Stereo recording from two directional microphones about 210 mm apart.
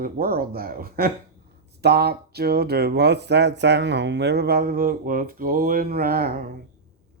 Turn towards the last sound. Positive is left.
turn(degrees=-45)  # may be behind; listen again after turning